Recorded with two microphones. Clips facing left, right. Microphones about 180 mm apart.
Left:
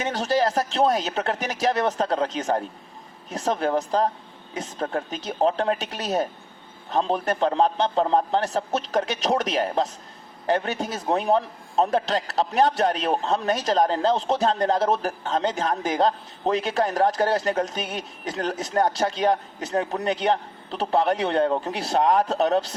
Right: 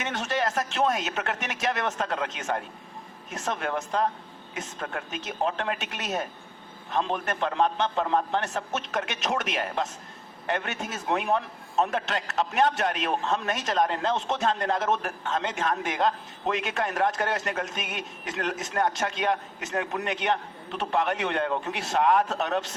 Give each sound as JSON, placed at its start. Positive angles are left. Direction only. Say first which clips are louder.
{"t": 0.0, "sound": "a man's voice", "louder": "left 6 dB", "side_deg": 35}